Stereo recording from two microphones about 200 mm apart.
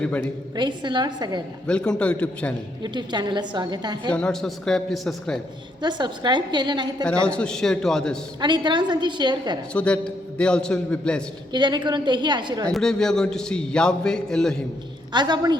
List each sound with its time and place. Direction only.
0.0 s a woman's voice: 5° left (ahead or behind)
0.5 s a woman's voice: 20° right (ahead or behind)
1.6 s a man's voice: 5° left (ahead or behind)
2.8 s a woman's voice: 20° right (ahead or behind)
4.1 s a man's voice: 5° left (ahead or behind)
5.8 s a woman's voice: 20° right (ahead or behind)
7.0 s a man's voice: 5° left (ahead or behind)
8.4 s a woman's voice: 20° right (ahead or behind)
9.7 s a man's voice: 5° left (ahead or behind)
11.5 s a woman's voice: 20° right (ahead or behind)
12.6 s a man's voice: 5° left (ahead or behind)
15.1 s a woman's voice: 20° right (ahead or behind)